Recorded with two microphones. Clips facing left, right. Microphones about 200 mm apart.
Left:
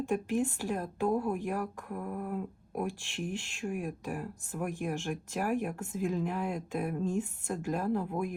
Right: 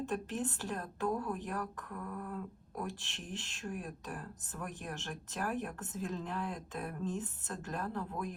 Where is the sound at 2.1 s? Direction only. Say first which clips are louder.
Left 6 dB; 60° left (ahead or behind).